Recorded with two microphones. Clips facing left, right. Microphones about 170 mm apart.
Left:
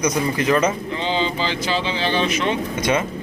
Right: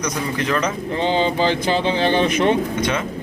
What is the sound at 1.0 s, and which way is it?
Speech, 50° right (ahead or behind).